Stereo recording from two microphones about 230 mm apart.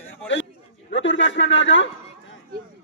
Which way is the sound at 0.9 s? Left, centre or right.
Left.